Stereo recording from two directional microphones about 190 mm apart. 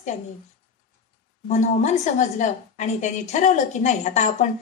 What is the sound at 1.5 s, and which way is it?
A woman's voice, 40° left (ahead or behind).